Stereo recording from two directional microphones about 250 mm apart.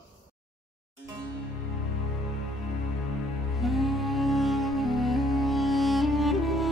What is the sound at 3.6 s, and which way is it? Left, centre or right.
Music, centre.